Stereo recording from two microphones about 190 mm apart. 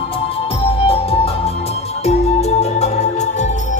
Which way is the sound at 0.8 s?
30° left (ahead or behind).